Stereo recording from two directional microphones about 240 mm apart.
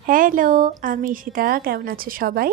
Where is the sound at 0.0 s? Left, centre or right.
Right.